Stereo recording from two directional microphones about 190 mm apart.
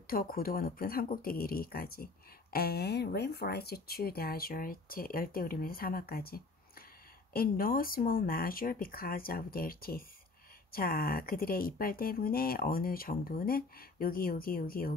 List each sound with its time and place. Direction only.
0.0 s speech: 50° left (ahead or behind)